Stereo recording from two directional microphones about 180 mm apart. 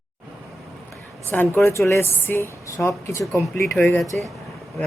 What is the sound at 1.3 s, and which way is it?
A woman's voice, 10° left (ahead or behind).